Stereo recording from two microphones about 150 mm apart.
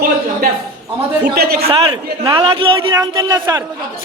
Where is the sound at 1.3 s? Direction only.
90° right.